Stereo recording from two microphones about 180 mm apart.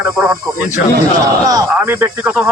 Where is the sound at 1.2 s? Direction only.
20° right (ahead or behind).